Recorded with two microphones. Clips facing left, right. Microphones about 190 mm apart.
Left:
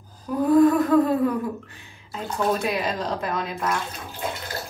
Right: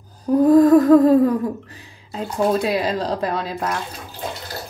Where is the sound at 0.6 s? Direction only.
40° right (ahead or behind).